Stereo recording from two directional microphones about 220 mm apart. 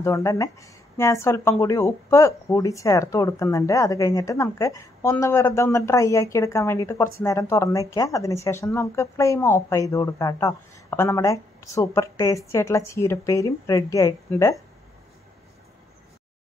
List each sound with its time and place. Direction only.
0.0 s speech: 15° left (ahead or behind)